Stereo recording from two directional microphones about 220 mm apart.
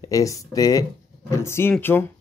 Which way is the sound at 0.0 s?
15° left (ahead or behind).